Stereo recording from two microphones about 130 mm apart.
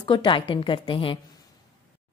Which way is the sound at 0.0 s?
40° left (ahead or behind).